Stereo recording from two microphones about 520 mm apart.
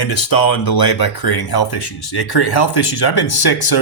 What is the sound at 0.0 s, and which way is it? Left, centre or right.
Speech, left.